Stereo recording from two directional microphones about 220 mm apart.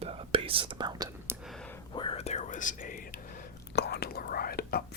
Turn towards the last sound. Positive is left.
turn(degrees=45)  # may be behind; listen again after turning